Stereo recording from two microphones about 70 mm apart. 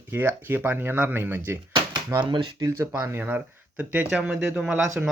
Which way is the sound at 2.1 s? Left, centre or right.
Right.